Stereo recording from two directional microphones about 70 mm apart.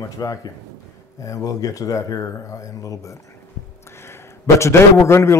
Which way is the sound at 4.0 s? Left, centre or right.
Left.